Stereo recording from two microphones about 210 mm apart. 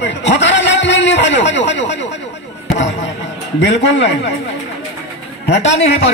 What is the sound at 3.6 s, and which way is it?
Speech, 55° left (ahead or behind).